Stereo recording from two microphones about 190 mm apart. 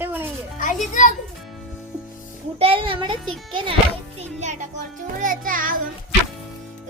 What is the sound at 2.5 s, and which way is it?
Speech, 30° right (ahead or behind).